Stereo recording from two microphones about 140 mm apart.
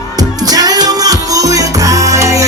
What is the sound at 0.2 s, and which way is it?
Music, 25° right (ahead or behind).